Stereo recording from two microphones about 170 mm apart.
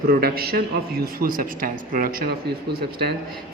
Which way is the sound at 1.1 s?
60° right (ahead or behind).